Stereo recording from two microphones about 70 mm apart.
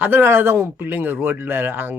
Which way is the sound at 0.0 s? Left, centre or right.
Right.